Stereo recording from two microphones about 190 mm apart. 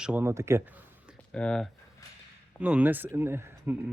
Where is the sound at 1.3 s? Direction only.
5° left (ahead or behind).